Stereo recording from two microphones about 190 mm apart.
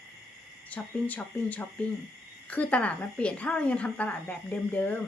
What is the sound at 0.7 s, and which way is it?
A woman's voice, 10° left (ahead or behind).